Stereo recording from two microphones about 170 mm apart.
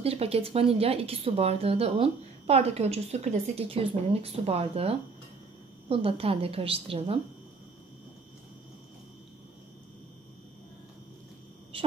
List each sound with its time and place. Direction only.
0.0 s speech: 35° right (ahead or behind)